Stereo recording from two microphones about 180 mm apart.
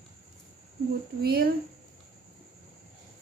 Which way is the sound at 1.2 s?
60° right (ahead or behind).